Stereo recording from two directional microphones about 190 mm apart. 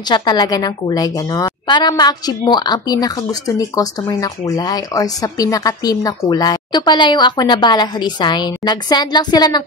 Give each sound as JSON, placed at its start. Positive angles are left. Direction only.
{"t": 0.1, "sound": "a woman's voice", "side_deg": 20}